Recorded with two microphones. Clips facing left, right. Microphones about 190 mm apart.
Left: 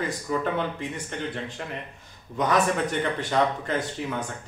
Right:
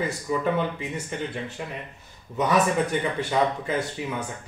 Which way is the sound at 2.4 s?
10° right (ahead or behind).